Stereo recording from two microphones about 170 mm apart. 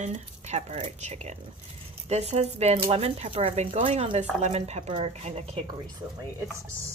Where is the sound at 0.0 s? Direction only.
40° right (ahead or behind).